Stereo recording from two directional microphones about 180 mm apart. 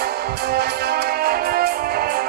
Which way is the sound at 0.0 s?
60° right (ahead or behind).